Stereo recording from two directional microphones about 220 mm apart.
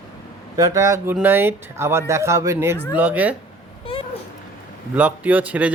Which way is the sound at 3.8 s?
25° left (ahead or behind).